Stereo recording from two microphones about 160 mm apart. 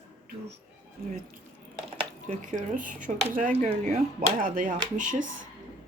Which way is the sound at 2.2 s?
50° right (ahead or behind).